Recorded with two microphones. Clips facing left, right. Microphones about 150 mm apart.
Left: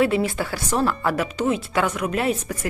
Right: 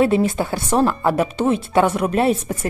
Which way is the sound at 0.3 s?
25° right (ahead or behind).